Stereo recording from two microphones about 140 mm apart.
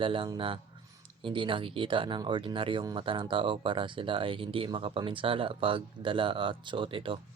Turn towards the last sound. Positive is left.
turn(degrees=-40)  # may be behind; listen again after turning